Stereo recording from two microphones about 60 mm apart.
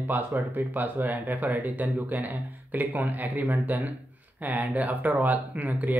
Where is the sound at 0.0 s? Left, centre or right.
Right.